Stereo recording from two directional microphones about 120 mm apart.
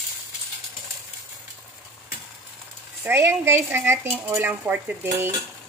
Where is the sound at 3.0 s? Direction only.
20° right (ahead or behind).